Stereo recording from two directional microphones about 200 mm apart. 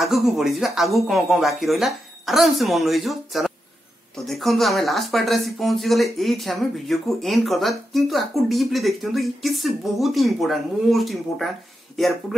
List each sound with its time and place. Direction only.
0.0 s speech: centre (ahead or behind)